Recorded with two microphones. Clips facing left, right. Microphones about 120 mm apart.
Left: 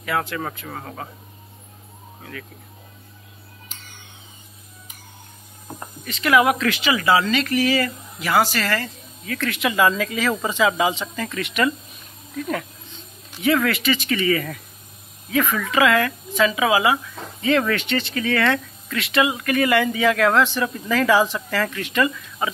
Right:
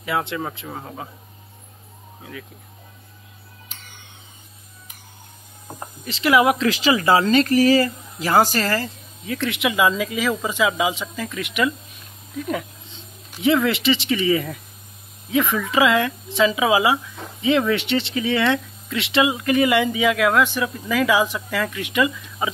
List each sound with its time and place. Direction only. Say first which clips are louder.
0.0 s speech: even; 25° right (ahead or behind)
6.0 s speech: right 1 dB; 25° right (ahead or behind); by 11.7 s 5° right (ahead or behind)
13.4 s speech: right 1 dB; 25° right (ahead or behind)